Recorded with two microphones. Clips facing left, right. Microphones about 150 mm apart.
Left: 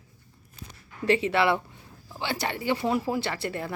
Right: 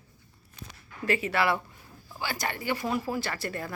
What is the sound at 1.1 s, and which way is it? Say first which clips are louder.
Speech: left 4 dB; 25° left (ahead or behind).